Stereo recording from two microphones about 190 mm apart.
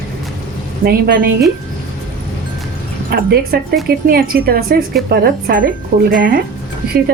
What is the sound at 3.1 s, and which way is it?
A woman's voice, 55° right (ahead or behind).